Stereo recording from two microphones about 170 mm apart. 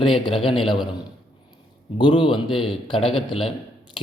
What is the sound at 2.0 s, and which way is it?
A man's voice, 30° left (ahead or behind).